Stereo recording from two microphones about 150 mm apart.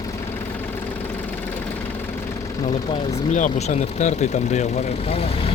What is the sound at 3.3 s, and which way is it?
Speech, 55° left (ahead or behind).